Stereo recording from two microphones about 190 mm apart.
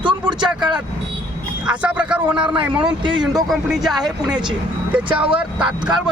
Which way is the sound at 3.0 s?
25° right (ahead or behind).